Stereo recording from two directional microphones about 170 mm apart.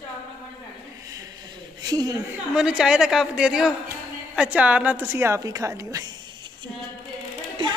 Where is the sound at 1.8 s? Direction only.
20° right (ahead or behind).